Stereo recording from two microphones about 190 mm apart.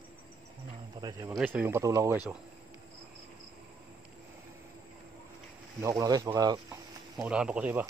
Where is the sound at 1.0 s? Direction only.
20° right (ahead or behind).